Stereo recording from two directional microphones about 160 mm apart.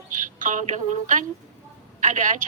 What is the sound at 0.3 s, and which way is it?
A woman's voice, 50° right (ahead or behind).